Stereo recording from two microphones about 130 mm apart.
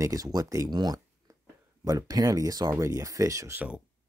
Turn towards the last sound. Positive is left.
turn(degrees=-25)  # may be behind; listen again after turning